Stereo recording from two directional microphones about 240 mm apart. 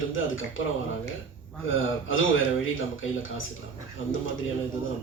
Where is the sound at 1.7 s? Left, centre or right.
Left.